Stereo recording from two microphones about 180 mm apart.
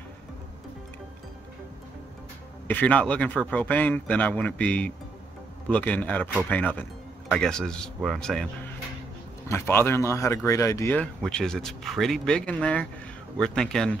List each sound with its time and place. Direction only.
2.7 s speech: 5° left (ahead or behind)
9.5 s speech: 15° left (ahead or behind)